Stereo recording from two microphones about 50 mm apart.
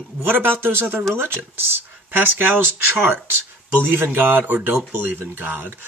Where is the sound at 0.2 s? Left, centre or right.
Right.